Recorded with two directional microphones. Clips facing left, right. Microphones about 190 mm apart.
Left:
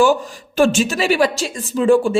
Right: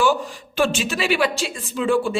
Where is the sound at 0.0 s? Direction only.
45° left (ahead or behind).